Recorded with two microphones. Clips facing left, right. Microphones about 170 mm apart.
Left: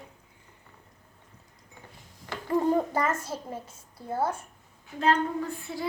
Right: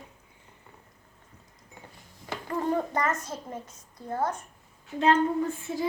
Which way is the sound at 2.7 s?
10° left (ahead or behind).